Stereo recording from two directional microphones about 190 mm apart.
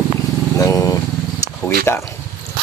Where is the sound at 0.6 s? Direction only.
20° left (ahead or behind).